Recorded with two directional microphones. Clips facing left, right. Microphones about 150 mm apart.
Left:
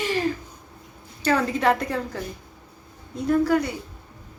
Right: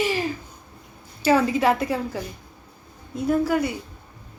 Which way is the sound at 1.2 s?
5° right (ahead or behind).